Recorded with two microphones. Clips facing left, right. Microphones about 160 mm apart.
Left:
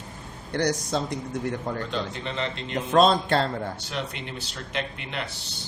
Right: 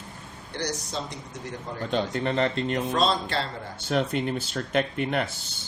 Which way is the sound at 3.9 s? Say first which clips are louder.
Right 8 dB; 45° right (ahead or behind).